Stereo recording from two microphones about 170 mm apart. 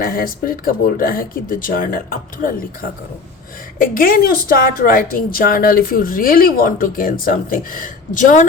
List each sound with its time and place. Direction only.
0.0 s a woman's voice: 60° left (ahead or behind)
3.9 s a woman's voice: 55° left (ahead or behind)